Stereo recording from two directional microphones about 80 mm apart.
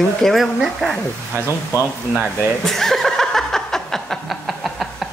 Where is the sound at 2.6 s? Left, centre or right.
Centre.